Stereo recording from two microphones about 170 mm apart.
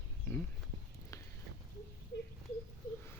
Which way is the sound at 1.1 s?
20° left (ahead or behind).